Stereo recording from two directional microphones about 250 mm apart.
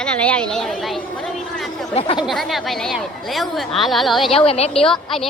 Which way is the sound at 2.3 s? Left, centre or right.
Centre.